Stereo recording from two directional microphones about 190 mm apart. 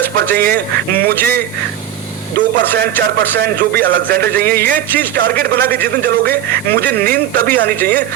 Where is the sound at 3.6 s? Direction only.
55° right (ahead or behind).